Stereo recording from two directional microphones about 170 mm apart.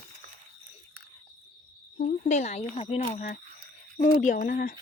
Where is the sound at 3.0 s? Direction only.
45° left (ahead or behind).